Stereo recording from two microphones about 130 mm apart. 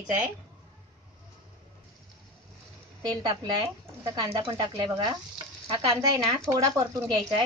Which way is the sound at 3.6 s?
25° right (ahead or behind).